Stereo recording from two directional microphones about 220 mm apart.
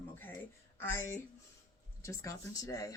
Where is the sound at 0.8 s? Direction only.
10° left (ahead or behind).